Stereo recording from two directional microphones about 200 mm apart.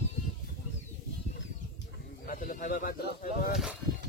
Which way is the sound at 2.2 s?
45° left (ahead or behind).